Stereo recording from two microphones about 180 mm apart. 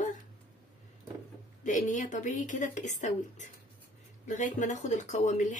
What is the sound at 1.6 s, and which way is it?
Speech, 45° left (ahead or behind).